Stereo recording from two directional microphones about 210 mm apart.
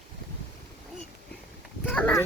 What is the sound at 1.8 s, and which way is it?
Speech, 10° left (ahead or behind).